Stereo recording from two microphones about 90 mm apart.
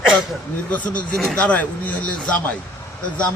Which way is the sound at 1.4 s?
15° left (ahead or behind).